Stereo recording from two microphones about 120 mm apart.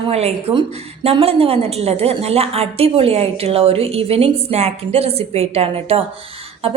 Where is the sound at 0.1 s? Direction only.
60° right (ahead or behind).